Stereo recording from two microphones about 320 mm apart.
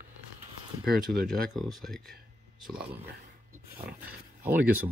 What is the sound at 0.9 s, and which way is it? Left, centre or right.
Speech, centre.